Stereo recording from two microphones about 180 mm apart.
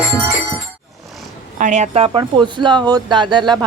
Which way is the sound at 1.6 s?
40° right (ahead or behind).